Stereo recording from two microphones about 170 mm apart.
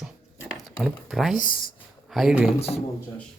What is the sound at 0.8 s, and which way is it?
Speech, centre (ahead or behind).